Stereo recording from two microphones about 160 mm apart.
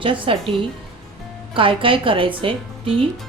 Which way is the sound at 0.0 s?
35° right (ahead or behind).